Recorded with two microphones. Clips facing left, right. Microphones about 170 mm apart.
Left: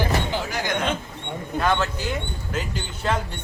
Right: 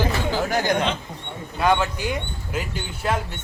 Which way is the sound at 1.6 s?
10° right (ahead or behind).